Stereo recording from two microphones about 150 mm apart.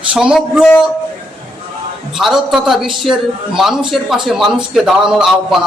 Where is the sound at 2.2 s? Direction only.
Centre (ahead or behind).